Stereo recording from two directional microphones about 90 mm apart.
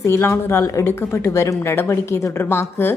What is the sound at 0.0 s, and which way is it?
A woman's voice, 30° left (ahead or behind).